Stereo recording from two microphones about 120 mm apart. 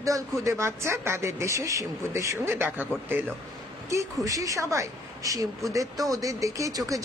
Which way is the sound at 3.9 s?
30° right (ahead or behind).